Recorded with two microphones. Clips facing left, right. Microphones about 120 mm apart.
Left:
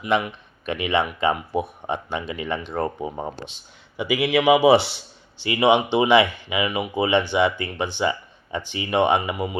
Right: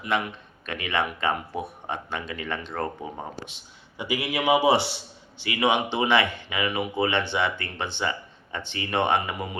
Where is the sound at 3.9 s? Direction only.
90° left.